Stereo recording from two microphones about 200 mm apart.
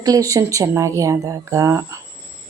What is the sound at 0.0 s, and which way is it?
Speech, 15° right (ahead or behind).